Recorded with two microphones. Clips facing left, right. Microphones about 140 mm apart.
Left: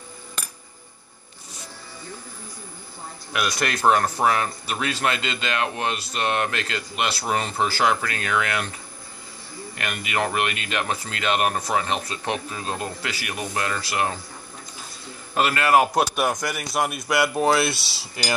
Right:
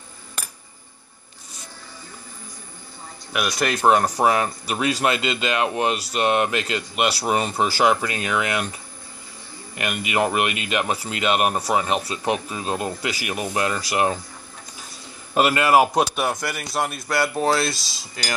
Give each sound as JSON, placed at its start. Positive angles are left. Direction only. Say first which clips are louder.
{"t": 3.3, "sound": "speech", "louder": "right 2 dB", "side_deg": -10}
{"t": 9.8, "sound": "speech", "louder": "right 4 dB", "side_deg": -15}
{"t": 15.3, "sound": "speech", "louder": "right 2 dB", "side_deg": -15}
{"t": 17.6, "sound": "cutlery", "louder": "left 1 dB", "side_deg": 20}